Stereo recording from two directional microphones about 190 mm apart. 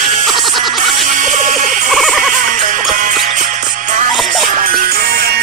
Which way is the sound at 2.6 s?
45° right (ahead or behind).